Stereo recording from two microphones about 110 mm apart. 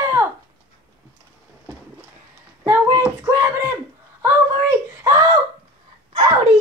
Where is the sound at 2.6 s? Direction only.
30° right (ahead or behind).